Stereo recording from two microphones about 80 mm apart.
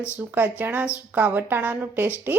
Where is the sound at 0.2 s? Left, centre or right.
Right.